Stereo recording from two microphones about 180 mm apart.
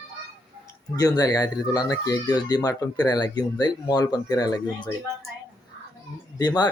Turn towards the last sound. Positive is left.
turn(degrees=20)  # may be behind; listen again after turning